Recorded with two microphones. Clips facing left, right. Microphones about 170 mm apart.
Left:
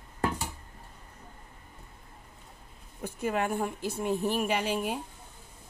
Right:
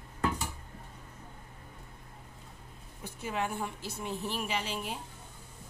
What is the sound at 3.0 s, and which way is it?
Speech, 55° left (ahead or behind).